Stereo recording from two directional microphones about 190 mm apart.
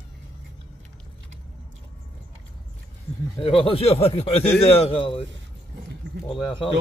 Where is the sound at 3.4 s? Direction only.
30° left (ahead or behind).